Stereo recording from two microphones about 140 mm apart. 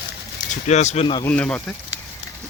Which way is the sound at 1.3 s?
10° left (ahead or behind).